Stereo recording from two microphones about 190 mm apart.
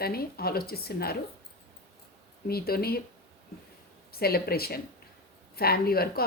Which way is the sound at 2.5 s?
55° left (ahead or behind).